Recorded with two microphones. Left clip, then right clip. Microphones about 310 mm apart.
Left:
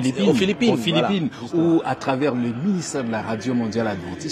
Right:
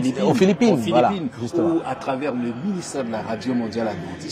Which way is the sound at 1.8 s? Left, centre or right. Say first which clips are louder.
Left 3 dB; left.